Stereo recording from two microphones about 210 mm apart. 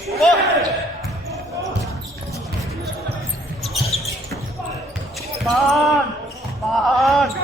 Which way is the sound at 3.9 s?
30° left (ahead or behind).